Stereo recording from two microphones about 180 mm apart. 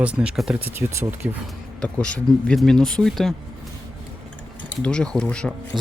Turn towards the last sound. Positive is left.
turn(degrees=5)  # may be behind; listen again after turning